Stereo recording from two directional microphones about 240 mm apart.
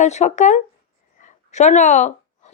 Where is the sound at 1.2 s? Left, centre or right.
Left.